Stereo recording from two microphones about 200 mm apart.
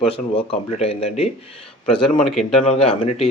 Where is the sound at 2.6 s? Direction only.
30° left (ahead or behind).